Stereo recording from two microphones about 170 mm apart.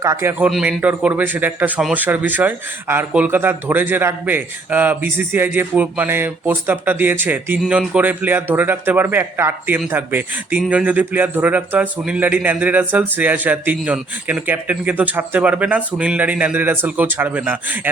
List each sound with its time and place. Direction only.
0.0 s speech: 20° right (ahead or behind)